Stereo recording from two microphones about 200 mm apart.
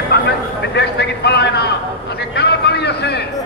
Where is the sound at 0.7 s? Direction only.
55° left (ahead or behind).